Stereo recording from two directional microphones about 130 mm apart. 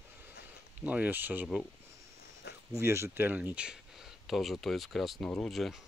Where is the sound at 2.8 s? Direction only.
20° right (ahead or behind); by 5.8 s centre (ahead or behind).